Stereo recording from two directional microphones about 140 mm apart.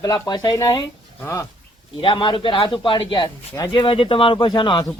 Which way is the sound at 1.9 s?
35° left (ahead or behind).